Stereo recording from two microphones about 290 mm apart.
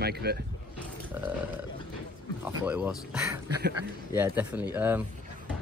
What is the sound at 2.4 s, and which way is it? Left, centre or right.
Speech, centre.